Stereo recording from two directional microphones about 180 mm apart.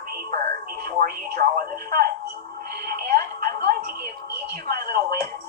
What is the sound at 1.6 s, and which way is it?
Music, 55° right (ahead or behind).